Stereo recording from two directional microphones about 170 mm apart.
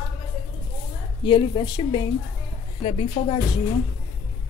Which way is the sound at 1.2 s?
30° left (ahead or behind).